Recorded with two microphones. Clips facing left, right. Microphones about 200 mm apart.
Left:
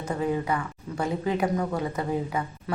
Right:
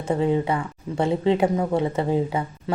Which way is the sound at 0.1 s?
25° right (ahead or behind).